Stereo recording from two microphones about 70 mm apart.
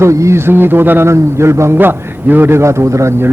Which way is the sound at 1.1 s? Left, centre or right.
Right.